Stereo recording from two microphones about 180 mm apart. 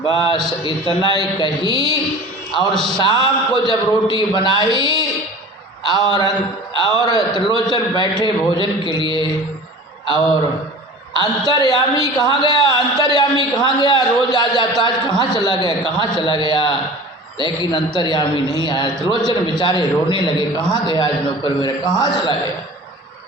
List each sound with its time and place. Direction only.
0.0 s a man's voice: 25° left (ahead or behind)
3.0 s a man's voice: 25° left (ahead or behind)
11.2 s a man's voice: 25° left (ahead or behind)